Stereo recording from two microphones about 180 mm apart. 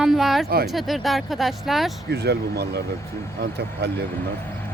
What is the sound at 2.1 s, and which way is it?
Speech, 65° right (ahead or behind).